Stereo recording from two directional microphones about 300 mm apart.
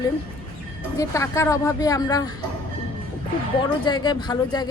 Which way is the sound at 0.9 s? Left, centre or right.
Centre.